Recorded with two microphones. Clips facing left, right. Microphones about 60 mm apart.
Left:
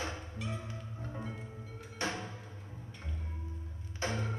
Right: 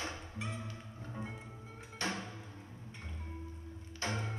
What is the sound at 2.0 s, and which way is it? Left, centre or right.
Music, left.